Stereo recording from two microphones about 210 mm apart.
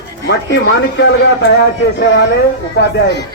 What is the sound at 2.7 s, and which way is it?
Speech, 55° left (ahead or behind).